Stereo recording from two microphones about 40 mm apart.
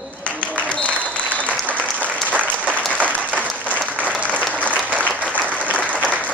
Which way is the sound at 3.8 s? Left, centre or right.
Right.